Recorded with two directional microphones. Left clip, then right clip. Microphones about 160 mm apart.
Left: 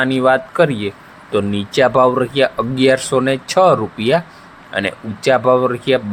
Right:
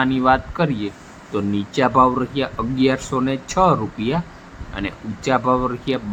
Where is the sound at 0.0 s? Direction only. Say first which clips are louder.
Left 3 dB; 45° left (ahead or behind).